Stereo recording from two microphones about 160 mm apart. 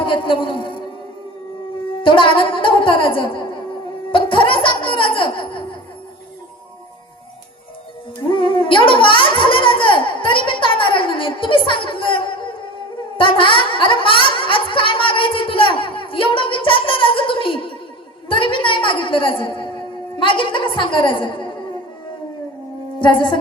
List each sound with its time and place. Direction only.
0.0 s a woman's voice: 30° left (ahead or behind)
2.0 s music: 30° left (ahead or behind)
4.1 s laughter: 30° left (ahead or behind)
8.3 s gargling: 30° left (ahead or behind)
13.1 s a woman's voice: 35° left (ahead or behind)
23.0 s a woman's voice: 30° left (ahead or behind)